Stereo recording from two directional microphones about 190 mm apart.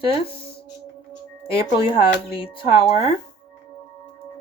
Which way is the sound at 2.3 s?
30° left (ahead or behind).